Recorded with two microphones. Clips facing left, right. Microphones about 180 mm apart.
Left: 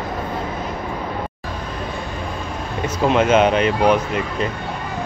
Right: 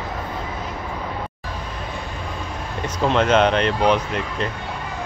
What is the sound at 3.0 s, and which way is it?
Speech, 5° left (ahead or behind).